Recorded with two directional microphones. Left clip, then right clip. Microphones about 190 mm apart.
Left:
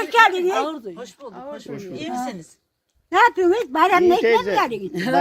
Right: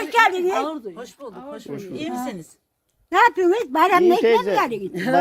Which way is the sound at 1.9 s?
60° right (ahead or behind).